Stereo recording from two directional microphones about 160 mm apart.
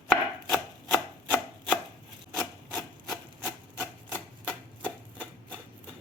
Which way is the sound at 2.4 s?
5° left (ahead or behind).